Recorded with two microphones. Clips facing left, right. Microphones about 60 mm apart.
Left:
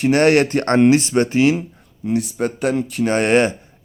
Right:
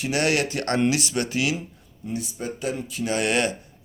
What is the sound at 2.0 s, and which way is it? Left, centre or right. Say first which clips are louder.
Speech: left 10 dB; left.